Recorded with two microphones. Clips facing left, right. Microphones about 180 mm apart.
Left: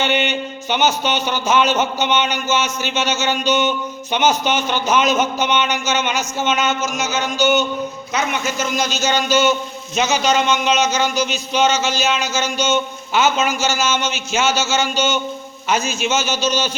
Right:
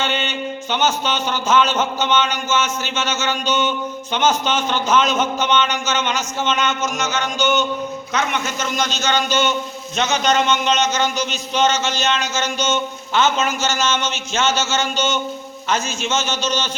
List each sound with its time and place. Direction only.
0.0 s music: 15° left (ahead or behind)
8.1 s a man's voice: 5° left (ahead or behind)
15.7 s music: 5° left (ahead or behind)